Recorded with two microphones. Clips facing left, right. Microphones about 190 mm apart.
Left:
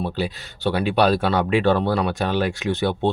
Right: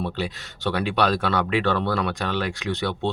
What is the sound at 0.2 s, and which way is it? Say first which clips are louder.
Speech: left 3 dB; 35° left (ahead or behind).